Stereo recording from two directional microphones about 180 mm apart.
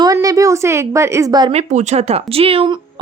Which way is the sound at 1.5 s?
35° right (ahead or behind).